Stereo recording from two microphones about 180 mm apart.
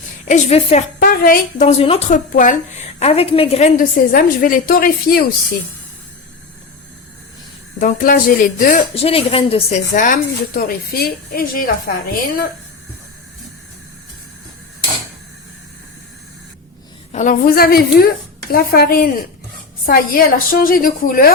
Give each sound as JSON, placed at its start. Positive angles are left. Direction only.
{"t": 0.3, "sound": "a woman's voice", "side_deg": 40}
{"t": 0.9, "sound": "a woman's voice", "side_deg": 50}
{"t": 1.6, "sound": "a woman's voice", "side_deg": 35}
{"t": 7.8, "sound": "a woman's voice", "side_deg": 50}
{"t": 9.0, "sound": "a woman's voice", "side_deg": 35}
{"t": 17.1, "sound": "a woman's voice", "side_deg": 45}